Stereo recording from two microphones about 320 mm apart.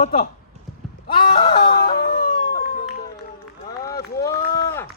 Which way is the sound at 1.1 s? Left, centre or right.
Centre.